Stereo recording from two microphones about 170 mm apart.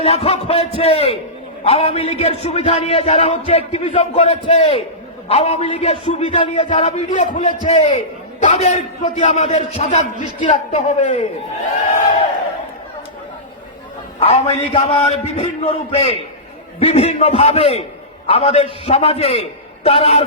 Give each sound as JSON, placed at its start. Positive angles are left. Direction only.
{"t": 0.0, "sound": "a man's voice", "side_deg": 35}
{"t": 14.2, "sound": "a man's voice", "side_deg": 35}